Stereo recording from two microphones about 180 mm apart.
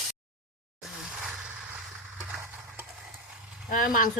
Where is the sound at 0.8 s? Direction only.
5° right (ahead or behind).